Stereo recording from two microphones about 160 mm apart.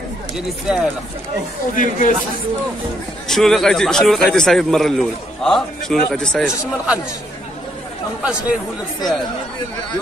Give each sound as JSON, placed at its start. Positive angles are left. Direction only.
{"t": 0.7, "sound": "a man's voice", "side_deg": -5}
{"t": 1.8, "sound": "speech", "side_deg": 55}
{"t": 3.3, "sound": "a man's voice", "side_deg": 0}
{"t": 8.2, "sound": "speech", "side_deg": -10}